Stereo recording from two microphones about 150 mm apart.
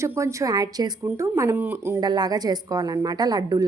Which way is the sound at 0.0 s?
20° right (ahead or behind).